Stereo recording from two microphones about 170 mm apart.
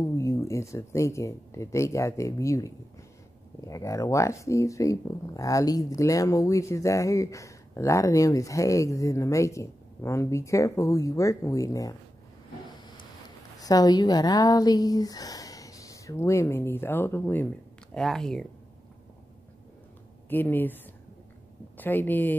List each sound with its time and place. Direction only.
0.0 s speech: 15° left (ahead or behind)
13.6 s speech: 20° left (ahead or behind); by 18.5 s 5° left (ahead or behind)
20.2 s speech: 10° left (ahead or behind)